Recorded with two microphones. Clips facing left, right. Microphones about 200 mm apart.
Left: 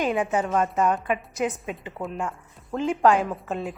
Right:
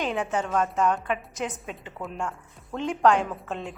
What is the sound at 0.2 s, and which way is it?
A woman's voice, 10° left (ahead or behind).